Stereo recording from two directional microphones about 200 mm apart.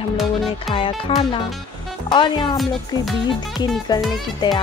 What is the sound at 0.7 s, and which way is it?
Speech, 25° left (ahead or behind).